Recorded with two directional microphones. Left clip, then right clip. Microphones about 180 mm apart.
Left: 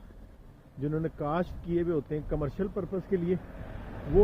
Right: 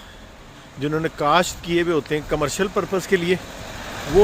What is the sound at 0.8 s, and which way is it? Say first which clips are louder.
Speech: right 11 dB; 15° right (ahead or behind).